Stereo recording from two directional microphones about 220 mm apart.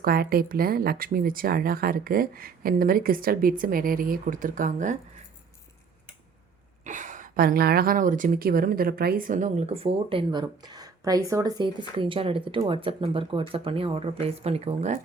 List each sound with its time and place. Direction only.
0.0 s speech: 45° right (ahead or behind)
6.8 s a woman's voice: 35° right (ahead or behind)